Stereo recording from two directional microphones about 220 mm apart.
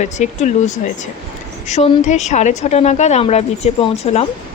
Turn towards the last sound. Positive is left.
turn(degrees=30)  # may be behind; listen again after turning